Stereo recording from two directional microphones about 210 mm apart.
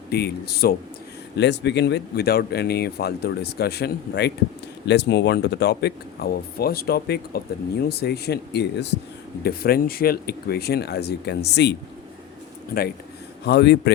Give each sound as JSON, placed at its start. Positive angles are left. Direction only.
{"t": 0.1, "sound": "speech", "side_deg": 50}
{"t": 13.4, "sound": "speech", "side_deg": 55}